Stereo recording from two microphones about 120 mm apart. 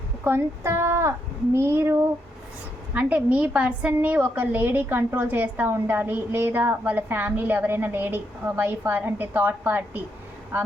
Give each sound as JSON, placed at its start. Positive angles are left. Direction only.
{"t": 0.3, "sound": "a woman's voice", "side_deg": -20}